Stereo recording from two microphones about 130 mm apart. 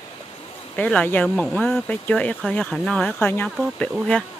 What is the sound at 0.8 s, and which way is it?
Speech, 10° left (ahead or behind).